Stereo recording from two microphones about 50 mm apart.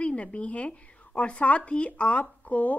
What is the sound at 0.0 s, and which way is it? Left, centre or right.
Speech, left.